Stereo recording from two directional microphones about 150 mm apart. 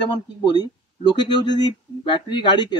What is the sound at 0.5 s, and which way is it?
Speech, 30° left (ahead or behind).